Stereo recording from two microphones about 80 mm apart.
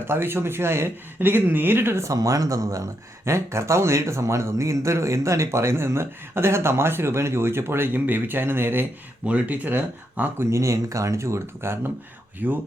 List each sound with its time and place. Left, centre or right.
0.1 s speech: right
2.1 s speech: right
9.2 s speech: centre
10.4 s speech: right
12.4 s speech: right